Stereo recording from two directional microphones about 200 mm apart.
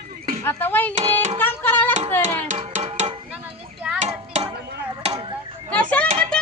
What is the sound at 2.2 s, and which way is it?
Music, 40° right (ahead or behind).